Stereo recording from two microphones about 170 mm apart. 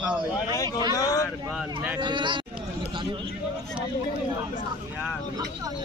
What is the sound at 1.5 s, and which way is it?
Speech, 10° right (ahead or behind).